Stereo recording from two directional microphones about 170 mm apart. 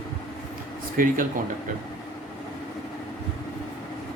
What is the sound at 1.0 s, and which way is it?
Speech, 55° right (ahead or behind).